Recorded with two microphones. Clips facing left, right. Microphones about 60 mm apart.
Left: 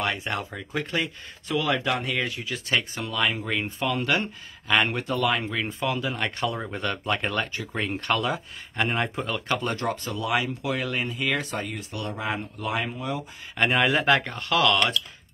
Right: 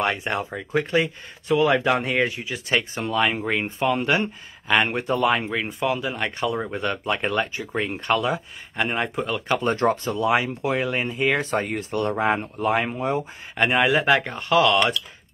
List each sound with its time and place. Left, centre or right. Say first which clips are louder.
0.0 s speech: right 4 dB; right
5.7 s speech: right 3 dB; centre
9.5 s speech: right 8 dB; right
13.6 s speech: right 3 dB; centre
14.2 s speech: right 4 dB; centre